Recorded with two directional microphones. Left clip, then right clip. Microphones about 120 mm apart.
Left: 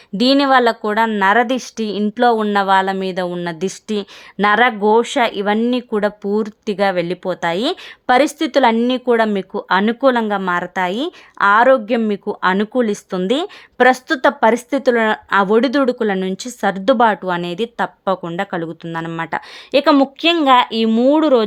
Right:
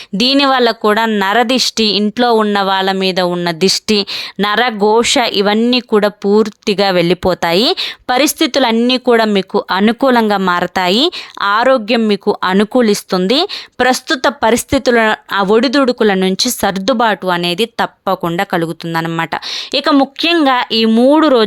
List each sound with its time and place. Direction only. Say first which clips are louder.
0.2 s speech: right 2 dB; 30° right (ahead or behind)
4.5 s speech: right 2 dB; 40° right (ahead or behind)
6.9 s speech: right 8 dB; 60° right (ahead or behind)
7.8 s speech: right 1 dB; 30° right (ahead or behind)
9.6 s speech: left 1 dB; 55° right (ahead or behind)
10.2 s speech: right 6 dB; 35° right (ahead or behind)
12.4 s speech: right 4 dB; 50° right (ahead or behind)
12.8 s speech: right 6 dB; 30° right (ahead or behind)
13.2 s speech: right 5 dB; 45° right (ahead or behind)
13.7 s speech: even; 25° right (ahead or behind)
17.0 s speech: right 2 dB; 20° right (ahead or behind)
17.8 s speech: right 4 dB; 40° right (ahead or behind)